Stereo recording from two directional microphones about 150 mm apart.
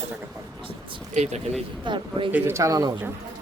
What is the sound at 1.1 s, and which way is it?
Speech, 50° right (ahead or behind).